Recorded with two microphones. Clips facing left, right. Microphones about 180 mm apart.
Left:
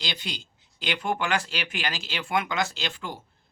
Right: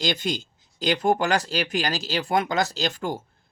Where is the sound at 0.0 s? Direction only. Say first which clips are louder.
Right 10 dB; 45° right (ahead or behind).